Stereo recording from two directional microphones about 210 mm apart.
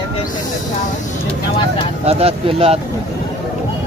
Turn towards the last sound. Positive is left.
turn(degrees=-30)  # may be behind; listen again after turning